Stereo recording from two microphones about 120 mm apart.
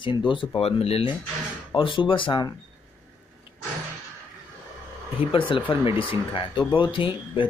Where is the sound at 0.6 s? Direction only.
55° left (ahead or behind).